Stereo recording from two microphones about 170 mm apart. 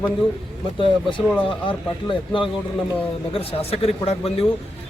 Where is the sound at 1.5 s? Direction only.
30° left (ahead or behind).